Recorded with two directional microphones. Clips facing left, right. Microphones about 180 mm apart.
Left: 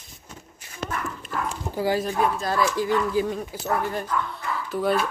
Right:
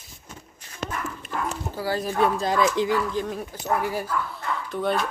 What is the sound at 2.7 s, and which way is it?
Speech, 20° right (ahead or behind).